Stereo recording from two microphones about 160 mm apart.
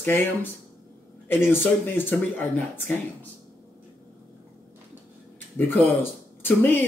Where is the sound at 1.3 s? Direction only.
15° left (ahead or behind).